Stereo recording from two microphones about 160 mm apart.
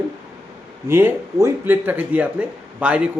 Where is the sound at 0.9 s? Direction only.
15° right (ahead or behind).